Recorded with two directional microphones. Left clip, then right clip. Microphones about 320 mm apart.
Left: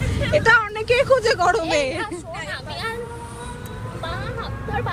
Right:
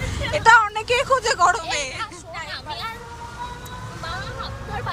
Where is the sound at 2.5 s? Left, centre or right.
Left.